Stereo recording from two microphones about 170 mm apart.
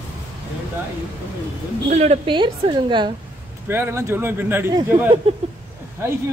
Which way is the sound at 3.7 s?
15° right (ahead or behind).